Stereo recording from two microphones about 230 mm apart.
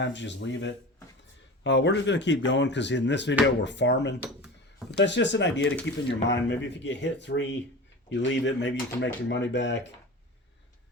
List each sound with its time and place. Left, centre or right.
0.0 s speech: left